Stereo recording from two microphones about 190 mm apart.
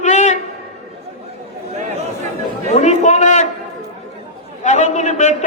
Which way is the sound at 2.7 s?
35° left (ahead or behind).